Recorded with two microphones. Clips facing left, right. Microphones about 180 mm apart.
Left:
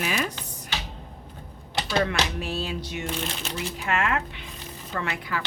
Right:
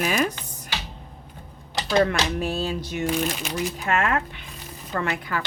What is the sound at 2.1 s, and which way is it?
A woman's voice, 45° right (ahead or behind).